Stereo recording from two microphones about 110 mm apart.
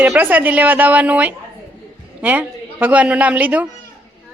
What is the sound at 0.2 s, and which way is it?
Speech, 15° right (ahead or behind).